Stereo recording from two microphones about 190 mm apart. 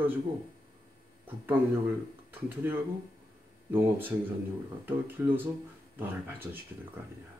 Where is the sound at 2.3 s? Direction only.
10° right (ahead or behind).